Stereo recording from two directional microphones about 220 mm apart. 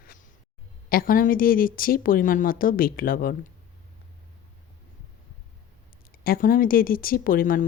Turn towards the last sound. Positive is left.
turn(degrees=40)  # may be behind; listen again after turning